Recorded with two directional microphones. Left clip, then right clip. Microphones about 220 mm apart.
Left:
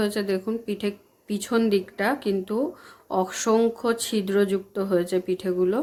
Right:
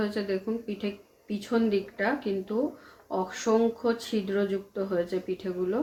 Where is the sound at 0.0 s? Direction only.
40° left (ahead or behind).